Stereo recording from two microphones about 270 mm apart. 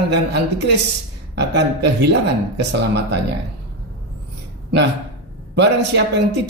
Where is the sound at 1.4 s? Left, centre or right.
Right.